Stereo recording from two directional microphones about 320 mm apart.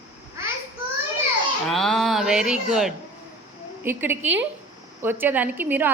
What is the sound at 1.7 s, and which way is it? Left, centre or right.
A woman's voice, centre.